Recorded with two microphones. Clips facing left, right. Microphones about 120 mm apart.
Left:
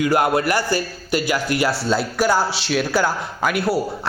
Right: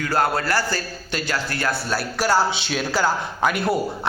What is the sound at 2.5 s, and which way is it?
A man's voice, centre (ahead or behind).